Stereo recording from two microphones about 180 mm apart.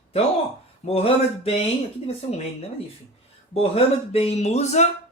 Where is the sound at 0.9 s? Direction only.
35° left (ahead or behind).